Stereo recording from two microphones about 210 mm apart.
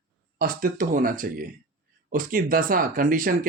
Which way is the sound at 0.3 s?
40° right (ahead or behind).